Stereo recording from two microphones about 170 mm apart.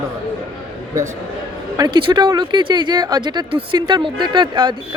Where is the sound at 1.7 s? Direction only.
25° right (ahead or behind).